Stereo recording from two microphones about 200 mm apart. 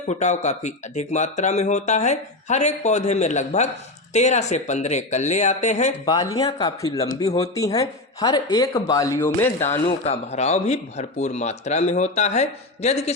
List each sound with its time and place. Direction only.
0.1 s speech: 35° left (ahead or behind)
6.1 s speech: 20° left (ahead or behind)
7.3 s speech: 30° left (ahead or behind)
7.5 s speech: 15° left (ahead or behind)
9.8 s speech: 30° left (ahead or behind)